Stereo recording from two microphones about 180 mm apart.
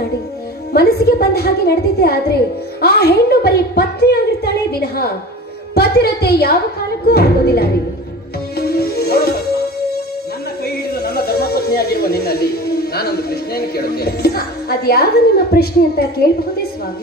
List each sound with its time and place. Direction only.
0.7 s a woman's voice: 60° left (ahead or behind)
8.5 s music: 60° left (ahead or behind)
10.6 s a sound: 60° left (ahead or behind)